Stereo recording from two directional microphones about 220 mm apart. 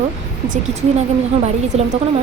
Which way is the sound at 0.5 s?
30° right (ahead or behind).